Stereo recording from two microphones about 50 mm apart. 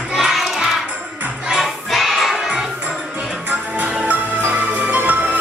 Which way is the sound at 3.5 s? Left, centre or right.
Right.